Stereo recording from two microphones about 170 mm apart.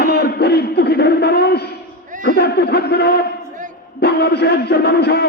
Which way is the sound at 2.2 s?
70° left (ahead or behind).